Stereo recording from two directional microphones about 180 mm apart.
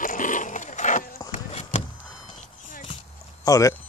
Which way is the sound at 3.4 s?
20° left (ahead or behind).